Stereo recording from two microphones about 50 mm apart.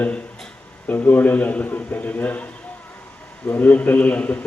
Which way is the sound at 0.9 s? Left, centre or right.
Left.